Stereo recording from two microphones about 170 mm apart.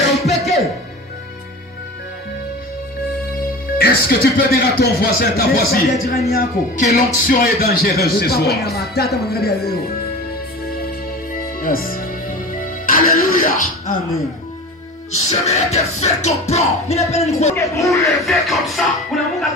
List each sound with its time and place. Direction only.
3.7 s a man's voice: 65° left (ahead or behind)
11.6 s music: 55° left (ahead or behind)
15.1 s music: 40° left (ahead or behind)
17.6 s speech: 20° left (ahead or behind)
18.0 s music: centre (ahead or behind)